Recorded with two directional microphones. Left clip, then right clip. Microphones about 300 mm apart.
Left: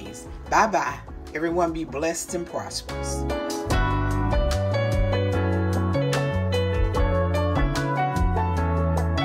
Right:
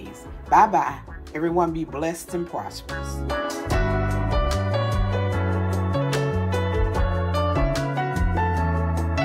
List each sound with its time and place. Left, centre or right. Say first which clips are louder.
0.5 s speech: right 4 dB; centre
2.9 s music: left 1 dB; centre